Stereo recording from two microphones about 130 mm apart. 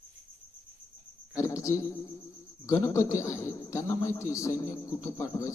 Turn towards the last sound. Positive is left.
turn(degrees=25)  # may be behind; listen again after turning